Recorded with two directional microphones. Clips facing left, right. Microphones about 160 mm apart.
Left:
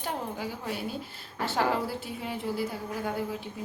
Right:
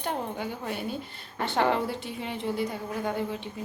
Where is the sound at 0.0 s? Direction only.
5° left (ahead or behind).